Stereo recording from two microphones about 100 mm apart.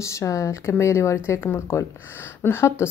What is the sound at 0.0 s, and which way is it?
Speech, 30° left (ahead or behind).